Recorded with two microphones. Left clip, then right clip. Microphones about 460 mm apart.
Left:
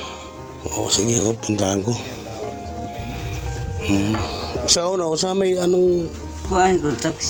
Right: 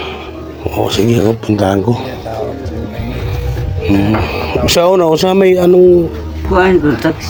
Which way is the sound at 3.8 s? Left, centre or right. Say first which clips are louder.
Right 9 dB; left.